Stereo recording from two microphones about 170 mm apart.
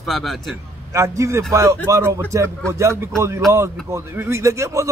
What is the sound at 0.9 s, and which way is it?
A man's voice, 15° right (ahead or behind).